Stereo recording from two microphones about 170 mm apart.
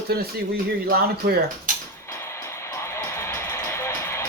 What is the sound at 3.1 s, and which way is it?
Music, 15° left (ahead or behind).